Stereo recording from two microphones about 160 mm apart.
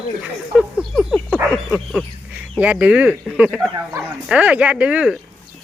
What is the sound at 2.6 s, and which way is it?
Speech, 10° right (ahead or behind).